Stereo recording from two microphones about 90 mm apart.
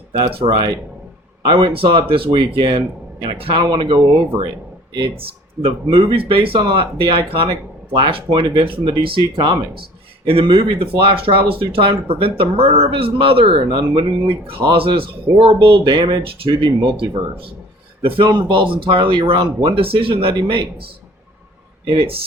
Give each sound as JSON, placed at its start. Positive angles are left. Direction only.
{"t": 0.1, "sound": "speech", "side_deg": -80}
{"t": 0.5, "sound": "speech", "side_deg": -55}
{"t": 2.4, "sound": "speech", "side_deg": -55}
{"t": 5.6, "sound": "speech", "side_deg": -75}
{"t": 6.6, "sound": "speech", "side_deg": -70}
{"t": 7.9, "sound": "speech", "side_deg": -70}
{"t": 15.9, "sound": "speech", "side_deg": -65}
{"t": 18.3, "sound": "speech", "side_deg": -55}
{"t": 19.6, "sound": "speech", "side_deg": -90}
{"t": 21.8, "sound": "speech", "side_deg": -90}